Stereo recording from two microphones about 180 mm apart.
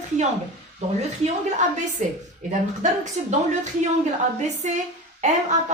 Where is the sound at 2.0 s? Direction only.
45° right (ahead or behind).